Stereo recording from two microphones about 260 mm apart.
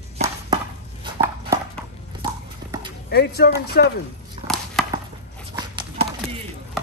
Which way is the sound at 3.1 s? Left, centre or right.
Left.